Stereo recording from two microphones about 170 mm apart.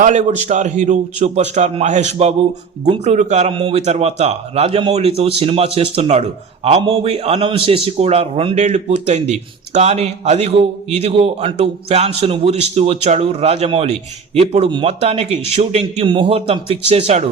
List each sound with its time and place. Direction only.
0.0 s a man's voice: 45° right (ahead or behind)
3.5 s a man's voice: 35° right (ahead or behind)